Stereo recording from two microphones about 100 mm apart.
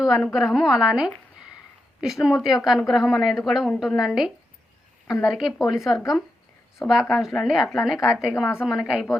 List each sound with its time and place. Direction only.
0.0 s a woman's voice: 5° right (ahead or behind)